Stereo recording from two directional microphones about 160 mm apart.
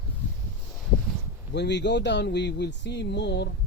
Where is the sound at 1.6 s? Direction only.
90° left.